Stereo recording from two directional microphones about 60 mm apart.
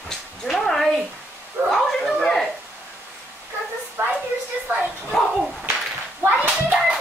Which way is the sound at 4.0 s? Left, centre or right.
Right.